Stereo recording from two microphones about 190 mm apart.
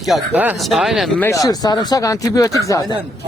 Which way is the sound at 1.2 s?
15° left (ahead or behind).